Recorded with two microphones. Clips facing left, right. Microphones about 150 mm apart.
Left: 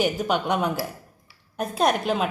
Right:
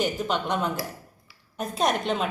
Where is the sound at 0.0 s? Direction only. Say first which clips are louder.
Left 3 dB; 10° left (ahead or behind).